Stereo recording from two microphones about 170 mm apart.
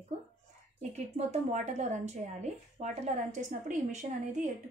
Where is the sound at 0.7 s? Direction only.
40° right (ahead or behind).